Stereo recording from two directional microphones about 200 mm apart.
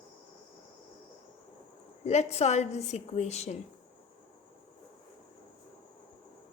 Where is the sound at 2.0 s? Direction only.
35° left (ahead or behind).